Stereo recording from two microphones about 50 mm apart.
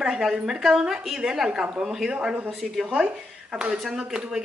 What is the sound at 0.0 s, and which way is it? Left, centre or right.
Speech, centre.